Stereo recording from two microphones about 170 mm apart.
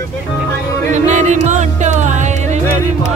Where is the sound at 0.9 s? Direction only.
45° right (ahead or behind).